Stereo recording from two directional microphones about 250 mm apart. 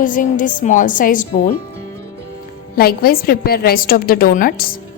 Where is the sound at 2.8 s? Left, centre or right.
Left.